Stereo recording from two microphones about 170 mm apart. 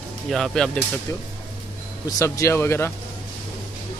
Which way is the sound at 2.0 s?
20° left (ahead or behind).